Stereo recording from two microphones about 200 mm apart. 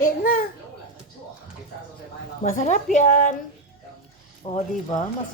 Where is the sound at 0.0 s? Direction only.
45° left (ahead or behind).